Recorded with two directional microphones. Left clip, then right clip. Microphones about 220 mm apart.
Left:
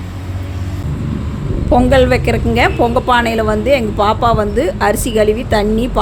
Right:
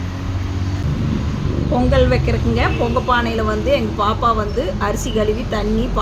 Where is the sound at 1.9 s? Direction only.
35° left (ahead or behind).